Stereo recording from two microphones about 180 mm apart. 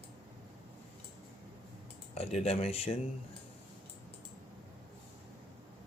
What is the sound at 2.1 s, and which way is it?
Speech, 35° left (ahead or behind).